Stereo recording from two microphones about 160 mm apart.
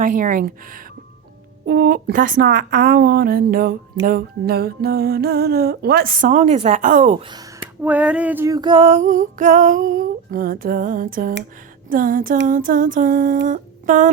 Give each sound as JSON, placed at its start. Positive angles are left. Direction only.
{"t": 0.0, "sound": "female singing", "side_deg": -55}
{"t": 1.6, "sound": "speech", "side_deg": -70}
{"t": 6.4, "sound": "speech", "side_deg": -45}
{"t": 7.2, "sound": "speech", "side_deg": -30}
{"t": 7.9, "sound": "a sound", "side_deg": -10}
{"t": 8.9, "sound": "female singing", "side_deg": -55}